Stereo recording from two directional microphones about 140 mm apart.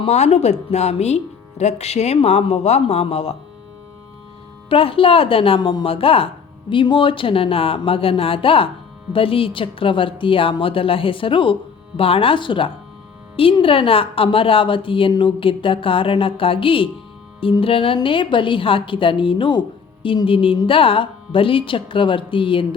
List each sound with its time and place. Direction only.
0.0 s speech: 50° left (ahead or behind)
4.7 s a woman's voice: 40° left (ahead or behind)